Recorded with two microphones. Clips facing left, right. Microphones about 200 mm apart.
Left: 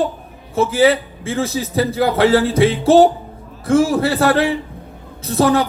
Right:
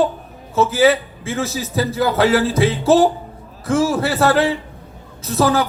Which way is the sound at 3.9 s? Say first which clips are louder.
Left 3 dB; 30° left (ahead or behind).